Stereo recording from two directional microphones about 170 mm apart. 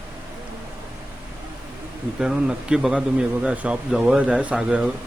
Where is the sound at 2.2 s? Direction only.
5° right (ahead or behind).